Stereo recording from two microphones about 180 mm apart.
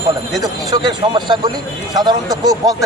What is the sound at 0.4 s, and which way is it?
A man's voice, 25° right (ahead or behind).